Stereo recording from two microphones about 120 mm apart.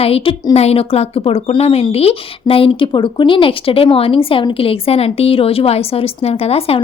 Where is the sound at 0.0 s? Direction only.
55° left (ahead or behind).